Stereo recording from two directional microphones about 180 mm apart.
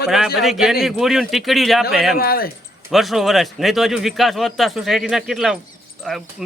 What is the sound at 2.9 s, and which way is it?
A man's voice, centre (ahead or behind).